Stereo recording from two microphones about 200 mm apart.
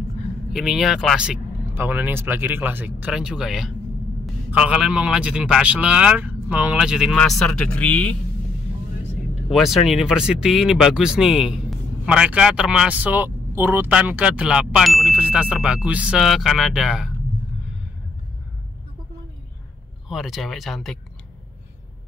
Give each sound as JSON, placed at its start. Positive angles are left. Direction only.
{"t": 0.5, "sound": "speech", "side_deg": 0}
{"t": 9.5, "sound": "speech", "side_deg": 0}
{"t": 20.1, "sound": "speech", "side_deg": 0}